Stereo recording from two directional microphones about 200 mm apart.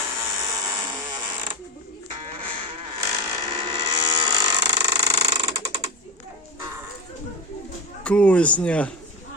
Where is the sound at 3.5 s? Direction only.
20° right (ahead or behind).